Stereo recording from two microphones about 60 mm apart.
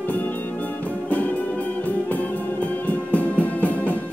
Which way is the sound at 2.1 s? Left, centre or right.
Left.